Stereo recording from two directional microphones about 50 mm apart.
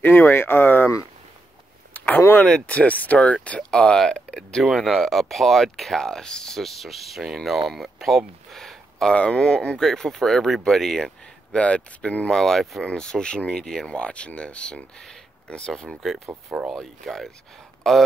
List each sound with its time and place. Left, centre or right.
0.0 s speech: left
2.6 s speech: left; by 8.2 s centre
8.5 s a sound: centre
9.1 s speech: left
9.8 s speech: centre
11.5 s speech: left
12.3 s speech: centre
15.7 s speech: centre